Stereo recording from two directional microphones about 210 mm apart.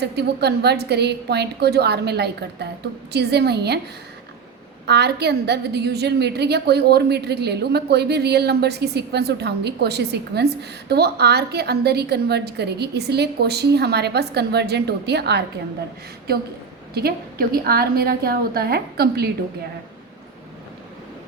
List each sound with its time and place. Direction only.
0.0 s a woman's voice: 50° right (ahead or behind)
4.9 s a woman's voice: 50° right (ahead or behind)
16.9 s a woman's voice: 50° right (ahead or behind)